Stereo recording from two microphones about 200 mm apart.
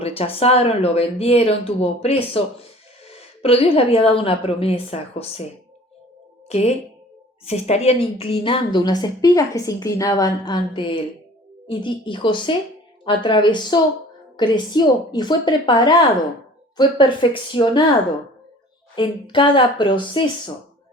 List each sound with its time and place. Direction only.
0.0 s a woman's voice: 30° left (ahead or behind)
6.5 s a woman's voice: 35° left (ahead or behind)
18.9 s a woman's voice: 25° left (ahead or behind)